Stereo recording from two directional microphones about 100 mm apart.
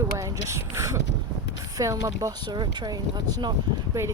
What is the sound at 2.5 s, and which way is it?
Speech, 45° right (ahead or behind).